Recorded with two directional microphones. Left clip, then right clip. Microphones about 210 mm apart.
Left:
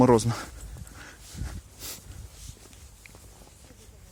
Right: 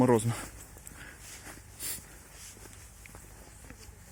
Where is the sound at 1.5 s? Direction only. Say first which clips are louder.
Even; 20° left (ahead or behind).